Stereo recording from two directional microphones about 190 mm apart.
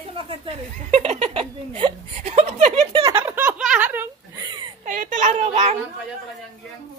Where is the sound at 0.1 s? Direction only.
30° right (ahead or behind).